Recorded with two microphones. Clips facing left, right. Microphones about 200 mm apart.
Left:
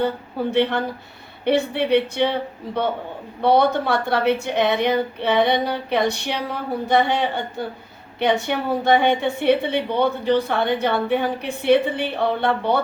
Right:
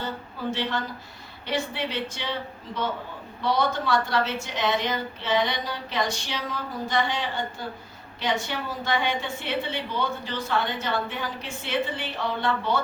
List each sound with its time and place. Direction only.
0.0 s a woman's voice: 60° left (ahead or behind)